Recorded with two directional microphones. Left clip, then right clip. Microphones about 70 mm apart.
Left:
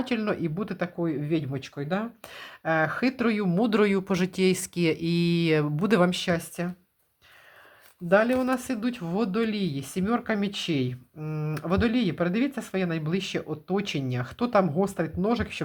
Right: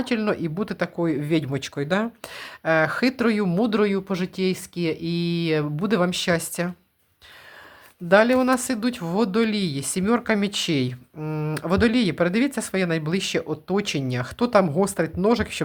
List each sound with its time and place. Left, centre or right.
0.0 s speech: right
0.9 s speech: right
2.2 s speech: right
3.7 s speech: centre
6.2 s speech: right
8.1 s speech: right
15.2 s speech: right